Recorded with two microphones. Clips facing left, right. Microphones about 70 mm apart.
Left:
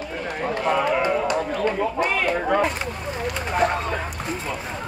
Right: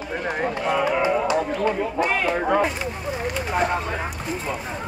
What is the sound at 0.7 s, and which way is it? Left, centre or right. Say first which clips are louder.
Speech: left 1 dB; centre.